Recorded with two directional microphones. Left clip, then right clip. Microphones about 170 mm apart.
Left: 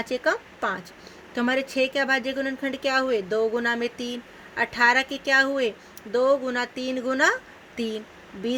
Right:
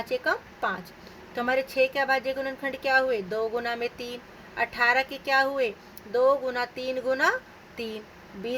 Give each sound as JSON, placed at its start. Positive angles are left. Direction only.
{"t": 0.0, "sound": "a woman's voice", "side_deg": 70}